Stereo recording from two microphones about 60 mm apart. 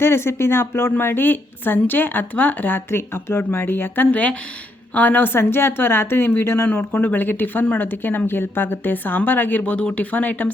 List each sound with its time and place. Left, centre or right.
0.0 s a woman's voice: left
6.7 s a woman's voice: left